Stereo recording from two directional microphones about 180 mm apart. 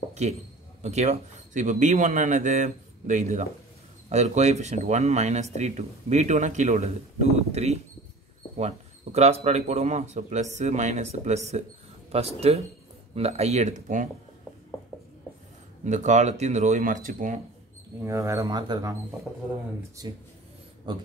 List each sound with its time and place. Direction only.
0.1 s a sound: 40° right (ahead or behind)
0.8 s speech: 40° right (ahead or behind)
15.8 s speech: 40° right (ahead or behind)
18.0 s speech: 15° right (ahead or behind)
20.0 s speech: 20° right (ahead or behind)